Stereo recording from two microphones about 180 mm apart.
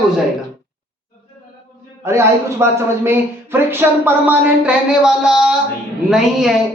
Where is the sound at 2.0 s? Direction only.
15° right (ahead or behind).